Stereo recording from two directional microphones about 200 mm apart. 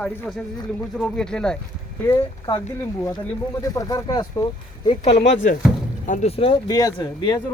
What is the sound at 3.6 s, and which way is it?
Speech, 15° left (ahead or behind).